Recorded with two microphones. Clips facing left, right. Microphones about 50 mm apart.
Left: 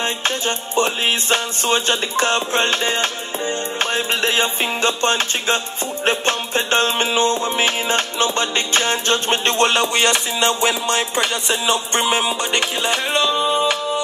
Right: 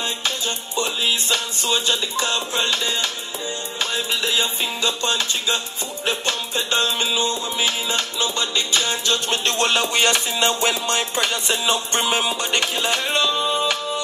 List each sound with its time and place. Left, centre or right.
0.0 s music: left
9.8 s music: centre